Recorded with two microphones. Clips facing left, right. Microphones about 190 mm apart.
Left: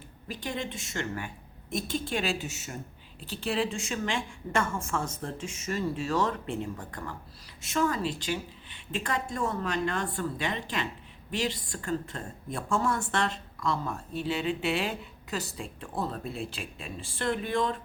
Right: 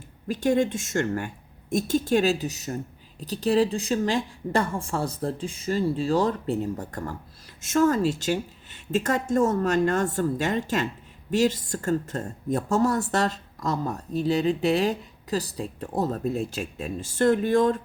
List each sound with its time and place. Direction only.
0.3 s a woman's voice: 45° right (ahead or behind)